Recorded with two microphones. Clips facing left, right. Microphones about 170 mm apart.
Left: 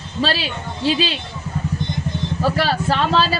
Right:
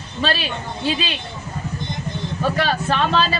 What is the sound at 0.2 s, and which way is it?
Speech, 30° left (ahead or behind).